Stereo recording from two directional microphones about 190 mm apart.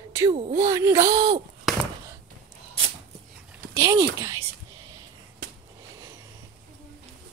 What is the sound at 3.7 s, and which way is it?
Speech, 15° right (ahead or behind).